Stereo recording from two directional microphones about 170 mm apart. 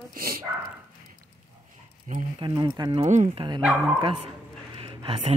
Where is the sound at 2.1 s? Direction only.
50° right (ahead or behind).